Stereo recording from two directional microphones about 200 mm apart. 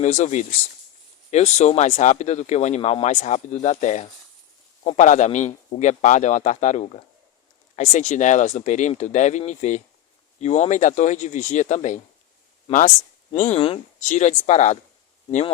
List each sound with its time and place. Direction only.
0.0 s speech: 35° left (ahead or behind)